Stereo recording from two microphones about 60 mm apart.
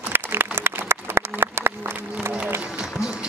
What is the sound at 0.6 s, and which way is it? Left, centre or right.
Applause, right.